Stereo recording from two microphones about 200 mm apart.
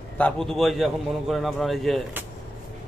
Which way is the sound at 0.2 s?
Centre (ahead or behind).